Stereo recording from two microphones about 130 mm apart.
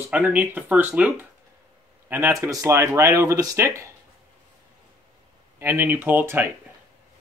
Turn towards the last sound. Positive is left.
turn(degrees=-15)  # may be behind; listen again after turning